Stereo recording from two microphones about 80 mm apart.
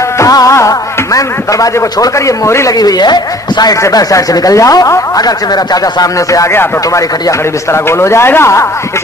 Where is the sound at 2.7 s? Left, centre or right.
Left.